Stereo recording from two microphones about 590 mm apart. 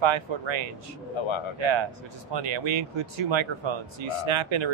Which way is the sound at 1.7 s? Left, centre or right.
Right.